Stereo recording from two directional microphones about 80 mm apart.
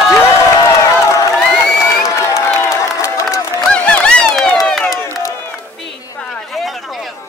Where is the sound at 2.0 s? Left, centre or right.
Left.